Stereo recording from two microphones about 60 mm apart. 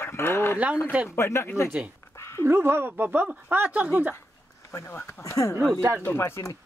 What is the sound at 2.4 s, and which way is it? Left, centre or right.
Speech, right.